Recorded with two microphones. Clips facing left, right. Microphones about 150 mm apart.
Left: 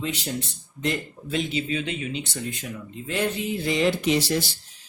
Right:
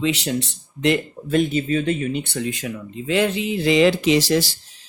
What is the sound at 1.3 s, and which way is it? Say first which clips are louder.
Speech: right 7 dB; 50° right (ahead or behind).